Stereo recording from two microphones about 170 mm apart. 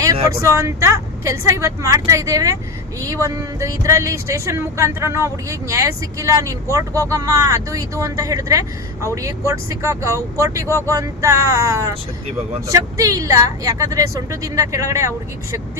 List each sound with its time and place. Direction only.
0.0 s speech: 20° right (ahead or behind)